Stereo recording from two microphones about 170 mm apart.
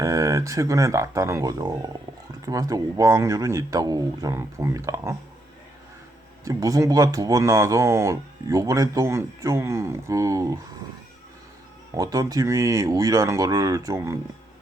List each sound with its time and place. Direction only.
0.0 s speech: 20° right (ahead or behind)
6.4 s speech: 20° right (ahead or behind)
11.9 s speech: 20° right (ahead or behind)